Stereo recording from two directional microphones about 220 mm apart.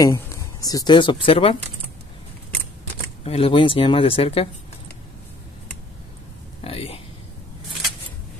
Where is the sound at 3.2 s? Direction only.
25° left (ahead or behind).